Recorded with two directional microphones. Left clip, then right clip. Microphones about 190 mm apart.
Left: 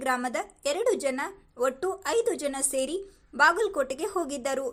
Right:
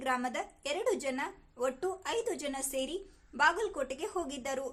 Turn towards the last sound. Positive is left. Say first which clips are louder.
# left 7 dB
turn(degrees=25)  # may be behind; listen again after turning